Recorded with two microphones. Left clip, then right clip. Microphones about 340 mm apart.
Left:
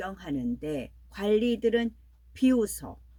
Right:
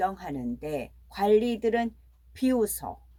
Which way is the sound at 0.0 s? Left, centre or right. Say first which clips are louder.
Right 5 dB; centre.